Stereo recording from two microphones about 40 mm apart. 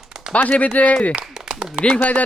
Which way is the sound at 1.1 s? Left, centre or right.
Right.